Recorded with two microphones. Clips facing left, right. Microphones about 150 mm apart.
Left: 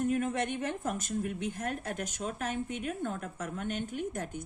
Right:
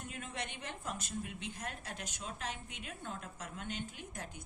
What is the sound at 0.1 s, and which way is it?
Speech, 50° left (ahead or behind).